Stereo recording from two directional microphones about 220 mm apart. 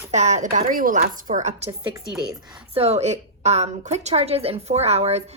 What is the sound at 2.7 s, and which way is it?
A woman's voice, 30° right (ahead or behind).